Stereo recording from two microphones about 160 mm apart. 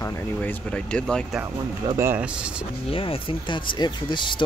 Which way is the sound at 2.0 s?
10° right (ahead or behind).